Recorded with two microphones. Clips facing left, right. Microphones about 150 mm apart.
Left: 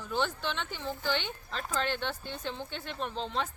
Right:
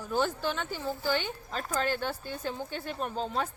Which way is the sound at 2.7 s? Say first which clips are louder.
Right 2 dB; 45° right (ahead or behind).